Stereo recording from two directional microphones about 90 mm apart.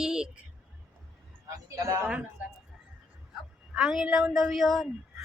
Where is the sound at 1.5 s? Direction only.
40° right (ahead or behind).